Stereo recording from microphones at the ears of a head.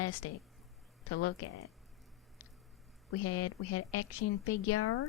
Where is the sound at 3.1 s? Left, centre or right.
Left.